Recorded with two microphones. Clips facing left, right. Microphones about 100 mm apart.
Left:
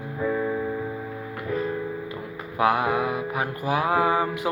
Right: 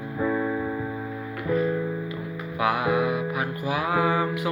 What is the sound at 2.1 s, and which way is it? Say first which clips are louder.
Music: right 1 dB; 40° left (ahead or behind).